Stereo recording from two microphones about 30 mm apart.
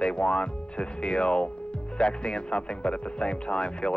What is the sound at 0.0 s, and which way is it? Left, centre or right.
Speech, left.